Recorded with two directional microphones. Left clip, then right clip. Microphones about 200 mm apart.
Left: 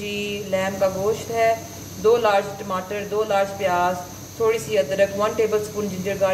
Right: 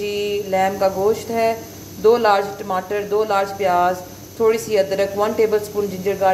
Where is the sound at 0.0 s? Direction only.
25° right (ahead or behind).